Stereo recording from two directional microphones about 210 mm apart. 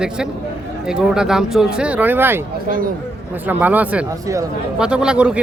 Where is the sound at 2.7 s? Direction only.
40° right (ahead or behind).